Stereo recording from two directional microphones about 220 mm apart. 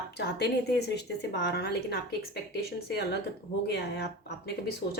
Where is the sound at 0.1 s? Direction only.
50° left (ahead or behind).